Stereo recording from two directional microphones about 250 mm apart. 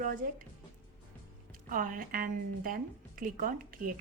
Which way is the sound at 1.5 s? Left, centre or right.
Right.